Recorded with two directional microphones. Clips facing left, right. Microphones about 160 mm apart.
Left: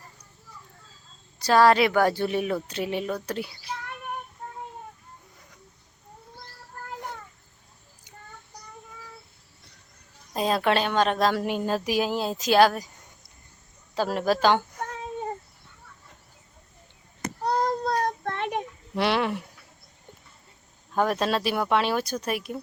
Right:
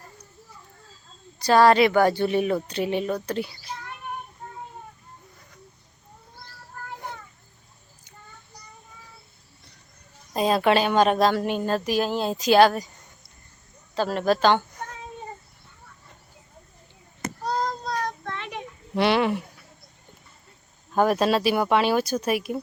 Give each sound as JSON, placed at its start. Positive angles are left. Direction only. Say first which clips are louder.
{"t": 1.4, "sound": "a woman's voice", "louder": "right 2 dB", "side_deg": 0}
{"t": 10.3, "sound": "a woman's voice", "louder": "right 3 dB", "side_deg": 0}
{"t": 11.3, "sound": "a woman's voice", "louder": "right 2 dB", "side_deg": 5}
{"t": 13.9, "sound": "speech", "louder": "right 2 dB", "side_deg": 10}
{"t": 17.4, "sound": "child singing", "louder": "left 3 dB", "side_deg": 60}
{"t": 18.9, "sound": "a sound", "louder": "right 3 dB", "side_deg": 0}
{"t": 20.9, "sound": "a woman's voice", "louder": "right 4 dB", "side_deg": -5}